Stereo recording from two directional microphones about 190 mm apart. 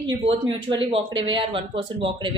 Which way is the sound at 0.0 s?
25° right (ahead or behind).